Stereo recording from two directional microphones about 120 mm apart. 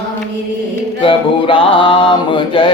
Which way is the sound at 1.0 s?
45° left (ahead or behind).